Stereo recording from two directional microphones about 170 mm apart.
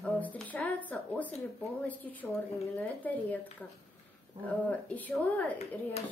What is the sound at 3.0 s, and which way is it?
Speech, 10° left (ahead or behind).